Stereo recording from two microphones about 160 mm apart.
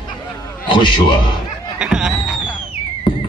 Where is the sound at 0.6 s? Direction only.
30° left (ahead or behind).